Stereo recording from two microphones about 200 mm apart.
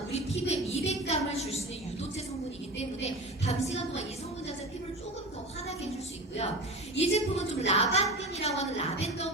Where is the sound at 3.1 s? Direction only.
30° left (ahead or behind).